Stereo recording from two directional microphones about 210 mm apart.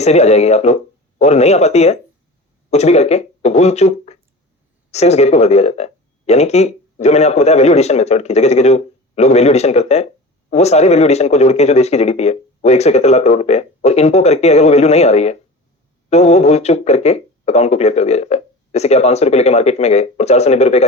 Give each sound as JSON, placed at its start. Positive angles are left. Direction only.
{"t": 0.0, "sound": "speech", "side_deg": 30}